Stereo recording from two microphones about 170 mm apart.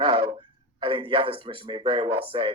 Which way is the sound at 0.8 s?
30° right (ahead or behind).